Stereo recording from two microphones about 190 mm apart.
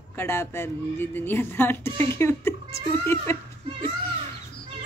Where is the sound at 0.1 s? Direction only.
10° left (ahead or behind).